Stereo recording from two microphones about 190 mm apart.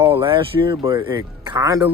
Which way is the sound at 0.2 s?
25° right (ahead or behind).